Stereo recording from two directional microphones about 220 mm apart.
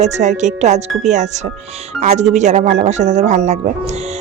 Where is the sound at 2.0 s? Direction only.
30° right (ahead or behind).